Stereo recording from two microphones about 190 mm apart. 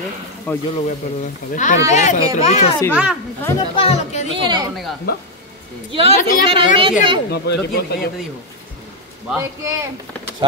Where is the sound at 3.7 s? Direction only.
30° left (ahead or behind).